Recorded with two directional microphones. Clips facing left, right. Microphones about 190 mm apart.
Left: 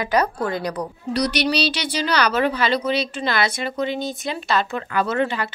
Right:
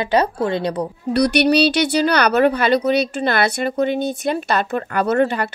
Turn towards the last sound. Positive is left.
turn(degrees=-55)  # may be behind; listen again after turning